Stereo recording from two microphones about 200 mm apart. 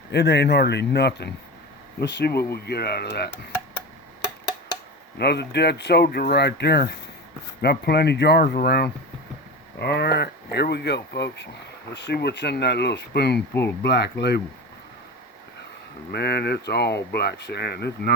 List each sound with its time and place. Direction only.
0.1 s speech: 55° left (ahead or behind)
5.1 s speech: 55° left (ahead or behind)
13.5 s speech: 10° left (ahead or behind)
13.8 s speech: 55° left (ahead or behind)
16.1 s speech: 55° left (ahead or behind)